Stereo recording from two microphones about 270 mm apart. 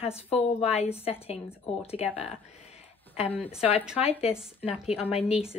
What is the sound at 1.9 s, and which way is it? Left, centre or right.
Speech, left.